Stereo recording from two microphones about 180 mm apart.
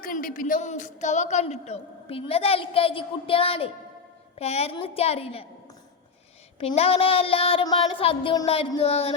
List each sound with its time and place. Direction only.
0.0 s a woman's voice: 50° left (ahead or behind); by 5.5 s 35° left (ahead or behind)
6.6 s a woman's voice: 35° left (ahead or behind)